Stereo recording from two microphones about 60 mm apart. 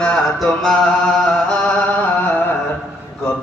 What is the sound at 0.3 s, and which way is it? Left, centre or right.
Mantra, centre.